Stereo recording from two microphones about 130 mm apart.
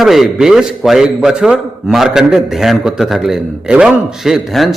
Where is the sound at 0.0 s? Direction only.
Centre (ahead or behind).